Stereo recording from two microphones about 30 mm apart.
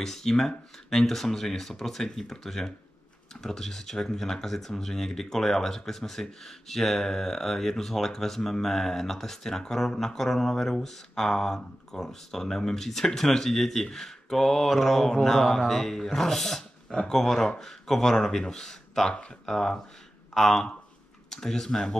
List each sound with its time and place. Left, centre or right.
0.0 s speech: centre